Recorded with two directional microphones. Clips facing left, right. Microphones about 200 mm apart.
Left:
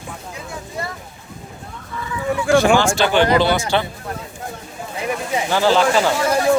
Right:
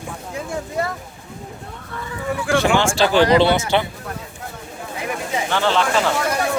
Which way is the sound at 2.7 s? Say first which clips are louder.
Even; 30° right (ahead or behind).